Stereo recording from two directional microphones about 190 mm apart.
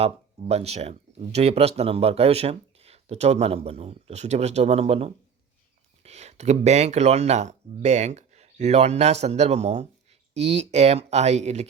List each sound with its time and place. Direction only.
0.0 s speech: 35° right (ahead or behind)